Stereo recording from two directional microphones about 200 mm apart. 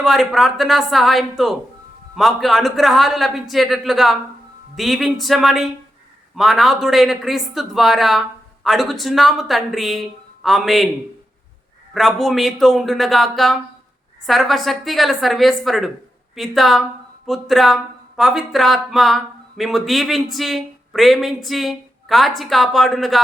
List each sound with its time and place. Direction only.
0.0 s speech: centre (ahead or behind)
11.9 s speech: centre (ahead or behind)